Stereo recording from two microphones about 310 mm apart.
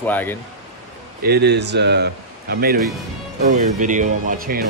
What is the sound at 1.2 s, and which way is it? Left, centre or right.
Speech, right.